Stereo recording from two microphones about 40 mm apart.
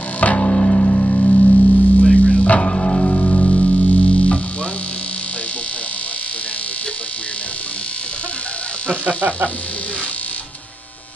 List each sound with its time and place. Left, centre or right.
0.4 s music: left
2.6 s music: left